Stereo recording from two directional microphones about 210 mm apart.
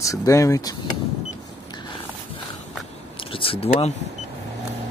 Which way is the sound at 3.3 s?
25° left (ahead or behind).